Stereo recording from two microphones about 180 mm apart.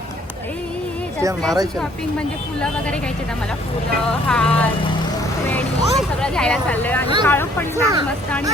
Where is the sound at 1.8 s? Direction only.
5° left (ahead or behind).